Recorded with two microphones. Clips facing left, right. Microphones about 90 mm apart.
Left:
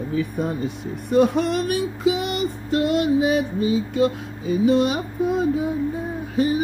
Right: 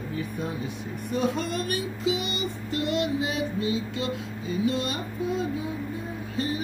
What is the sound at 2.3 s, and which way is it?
Child singing, 60° left (ahead or behind).